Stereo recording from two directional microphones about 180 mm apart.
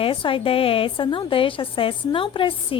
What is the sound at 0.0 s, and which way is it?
A woman's voice, 30° left (ahead or behind).